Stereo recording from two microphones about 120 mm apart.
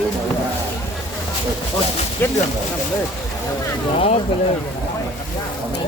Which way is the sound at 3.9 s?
60° left (ahead or behind).